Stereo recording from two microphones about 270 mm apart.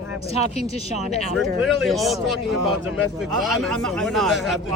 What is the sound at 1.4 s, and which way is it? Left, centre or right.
A man's voice, centre.